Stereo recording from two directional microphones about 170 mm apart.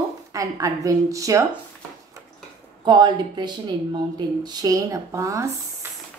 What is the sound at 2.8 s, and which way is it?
Speech, 25° right (ahead or behind).